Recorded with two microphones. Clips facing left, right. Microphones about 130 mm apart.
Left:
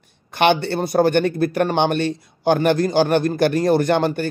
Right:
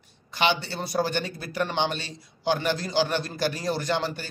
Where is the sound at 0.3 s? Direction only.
60° left (ahead or behind).